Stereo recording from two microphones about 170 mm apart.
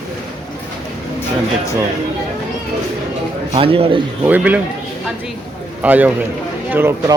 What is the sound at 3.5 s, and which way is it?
Speech, 35° right (ahead or behind).